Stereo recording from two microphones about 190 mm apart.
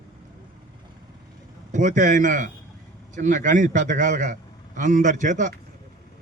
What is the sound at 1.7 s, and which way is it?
A man's voice, 40° right (ahead or behind).